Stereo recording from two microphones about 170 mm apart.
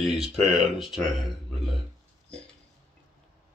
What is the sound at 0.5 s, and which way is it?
Speech, centre (ahead or behind).